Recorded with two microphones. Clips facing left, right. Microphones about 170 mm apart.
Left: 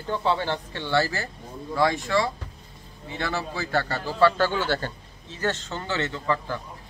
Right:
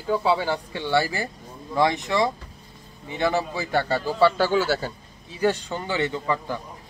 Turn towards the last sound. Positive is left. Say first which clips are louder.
# right 1 dB
turn(degrees=-15)  # may be behind; listen again after turning